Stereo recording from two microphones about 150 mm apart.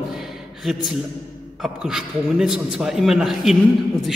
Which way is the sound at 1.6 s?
5° right (ahead or behind).